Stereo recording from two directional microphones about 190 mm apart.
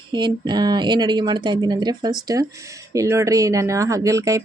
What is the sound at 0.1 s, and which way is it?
Speech, 25° right (ahead or behind).